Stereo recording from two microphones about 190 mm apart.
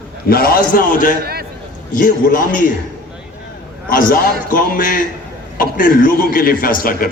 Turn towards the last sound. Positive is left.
turn(degrees=50)  # may be behind; listen again after turning